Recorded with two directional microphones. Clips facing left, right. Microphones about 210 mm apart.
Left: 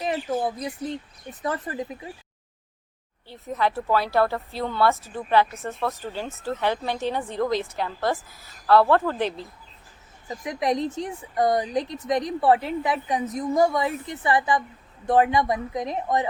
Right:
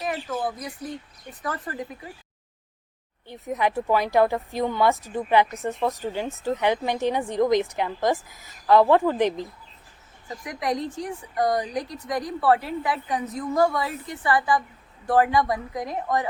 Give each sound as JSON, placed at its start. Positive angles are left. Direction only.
{"t": 0.0, "sound": "a woman's voice", "side_deg": 25}
{"t": 3.5, "sound": "speech", "side_deg": -15}
{"t": 10.2, "sound": "a woman's voice", "side_deg": 20}